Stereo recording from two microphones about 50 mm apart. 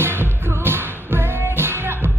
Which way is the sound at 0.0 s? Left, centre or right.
Right.